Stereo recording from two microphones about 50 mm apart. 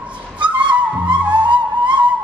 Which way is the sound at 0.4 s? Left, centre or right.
Right.